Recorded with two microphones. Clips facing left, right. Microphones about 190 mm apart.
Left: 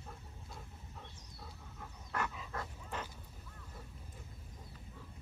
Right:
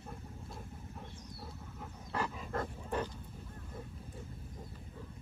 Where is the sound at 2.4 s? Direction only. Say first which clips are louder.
Right 6 dB; 50° right (ahead or behind).